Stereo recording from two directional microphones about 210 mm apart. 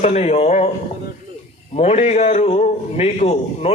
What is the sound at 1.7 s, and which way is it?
A man's voice, 30° left (ahead or behind).